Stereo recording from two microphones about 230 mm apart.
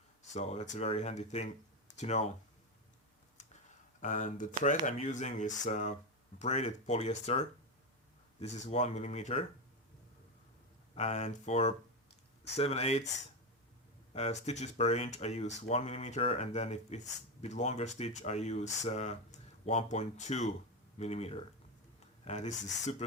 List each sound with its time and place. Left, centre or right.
0.3 s speech: left
4.0 s speech: left
10.9 s speech: left
14.1 s speech: left